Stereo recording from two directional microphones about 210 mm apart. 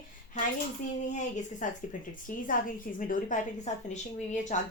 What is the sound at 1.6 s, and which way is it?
A woman's voice, 40° left (ahead or behind).